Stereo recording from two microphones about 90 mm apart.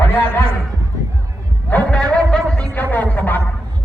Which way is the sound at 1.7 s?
15° left (ahead or behind).